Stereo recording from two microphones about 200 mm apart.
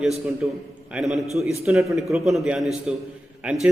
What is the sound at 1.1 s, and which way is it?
A man's voice, centre (ahead or behind).